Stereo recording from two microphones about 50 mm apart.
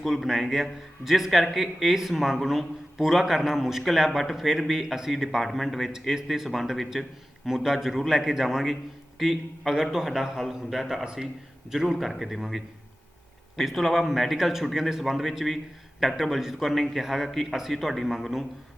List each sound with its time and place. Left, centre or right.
0.0 s a man's voice: centre
5.9 s a man's voice: centre